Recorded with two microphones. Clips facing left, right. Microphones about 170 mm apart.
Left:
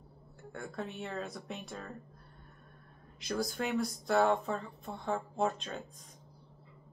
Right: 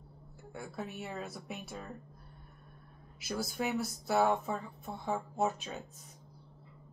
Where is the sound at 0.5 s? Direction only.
5° right (ahead or behind).